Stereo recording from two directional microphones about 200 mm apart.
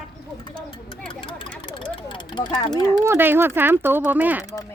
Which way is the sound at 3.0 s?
10° right (ahead or behind).